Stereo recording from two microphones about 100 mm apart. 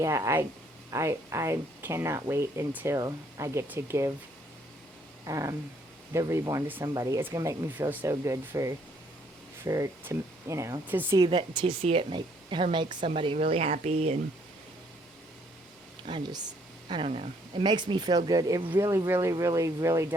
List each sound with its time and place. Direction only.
0.0 s speech: 30° right (ahead or behind)
5.2 s speech: 35° right (ahead or behind)
10.8 s speech: 20° right (ahead or behind)
11.2 s speech: 50° right (ahead or behind)
11.8 s speech: 80° right
12.1 s speech: 50° right (ahead or behind)
13.1 s speech: 70° right (ahead or behind); by 14.2 s 90° right
16.0 s speech: 50° right (ahead or behind)
17.0 s speech: 65° right (ahead or behind)
17.6 s speech: 50° right (ahead or behind); by 20.1 s 30° right (ahead or behind)